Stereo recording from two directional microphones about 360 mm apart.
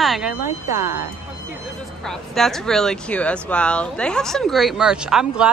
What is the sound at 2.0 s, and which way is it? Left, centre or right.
Speech, centre.